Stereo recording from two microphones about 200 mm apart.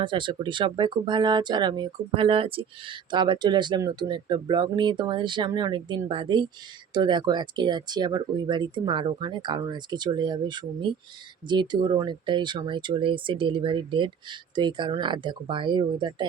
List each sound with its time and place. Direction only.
0.0 s speech: 25° right (ahead or behind)